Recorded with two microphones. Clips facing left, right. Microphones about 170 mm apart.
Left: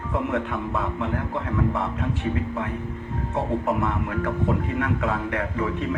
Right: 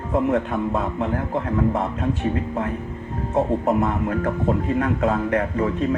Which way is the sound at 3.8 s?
40° right (ahead or behind).